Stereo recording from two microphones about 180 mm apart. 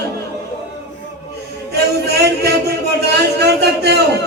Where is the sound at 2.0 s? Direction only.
65° right (ahead or behind).